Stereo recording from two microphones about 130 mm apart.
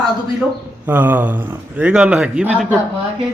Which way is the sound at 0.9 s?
15° right (ahead or behind).